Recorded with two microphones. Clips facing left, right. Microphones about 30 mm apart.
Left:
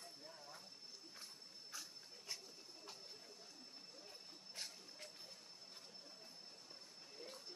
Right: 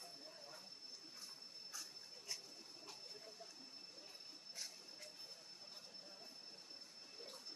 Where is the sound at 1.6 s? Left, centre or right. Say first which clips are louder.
Left 1 dB; left.